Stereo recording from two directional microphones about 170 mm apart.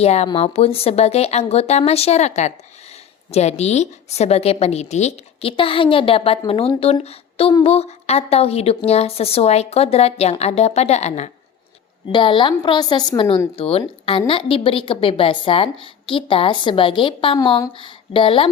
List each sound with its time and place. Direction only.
0.0 s a woman's voice: 40° left (ahead or behind)
12.0 s a woman's voice: 30° left (ahead or behind)